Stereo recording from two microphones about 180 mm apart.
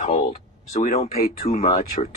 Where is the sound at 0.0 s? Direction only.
40° left (ahead or behind).